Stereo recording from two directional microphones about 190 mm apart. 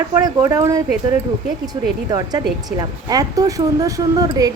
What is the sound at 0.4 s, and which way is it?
Speech, 15° right (ahead or behind).